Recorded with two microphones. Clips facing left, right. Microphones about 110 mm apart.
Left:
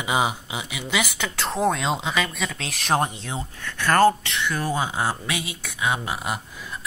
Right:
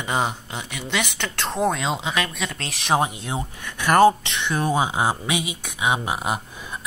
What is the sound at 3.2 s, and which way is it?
Speech, 15° right (ahead or behind).